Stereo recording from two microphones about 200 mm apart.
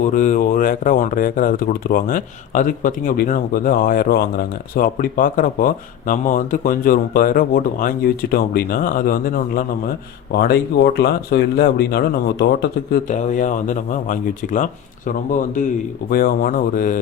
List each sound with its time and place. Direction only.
0.0 s speech: 40° left (ahead or behind)